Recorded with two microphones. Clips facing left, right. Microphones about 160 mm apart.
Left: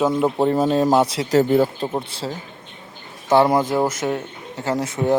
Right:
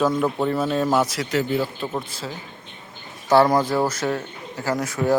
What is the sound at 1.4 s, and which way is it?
Speech, 45° left (ahead or behind).